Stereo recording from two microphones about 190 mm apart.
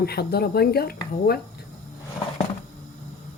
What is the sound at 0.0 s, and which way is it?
Speech, 55° left (ahead or behind).